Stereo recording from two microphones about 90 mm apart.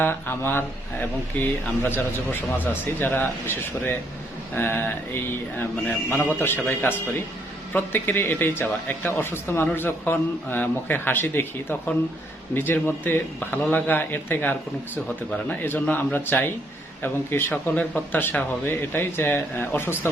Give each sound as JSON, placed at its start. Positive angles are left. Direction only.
{"t": 0.0, "sound": "speech", "side_deg": 25}
{"t": 6.1, "sound": "speech", "side_deg": 25}